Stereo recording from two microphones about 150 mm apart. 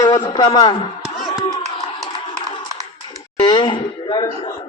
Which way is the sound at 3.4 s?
30° left (ahead or behind).